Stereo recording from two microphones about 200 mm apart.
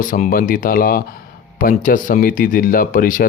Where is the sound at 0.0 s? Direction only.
40° left (ahead or behind).